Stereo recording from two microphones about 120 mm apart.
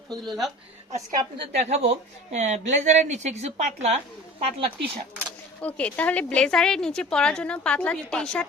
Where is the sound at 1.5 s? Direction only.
60° right (ahead or behind).